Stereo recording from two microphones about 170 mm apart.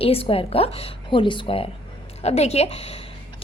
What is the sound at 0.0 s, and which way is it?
A woman's voice, 35° left (ahead or behind).